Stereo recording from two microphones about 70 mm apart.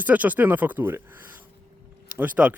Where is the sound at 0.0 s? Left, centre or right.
Right.